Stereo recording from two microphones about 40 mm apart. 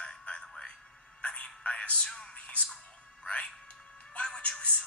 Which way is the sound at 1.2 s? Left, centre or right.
Left.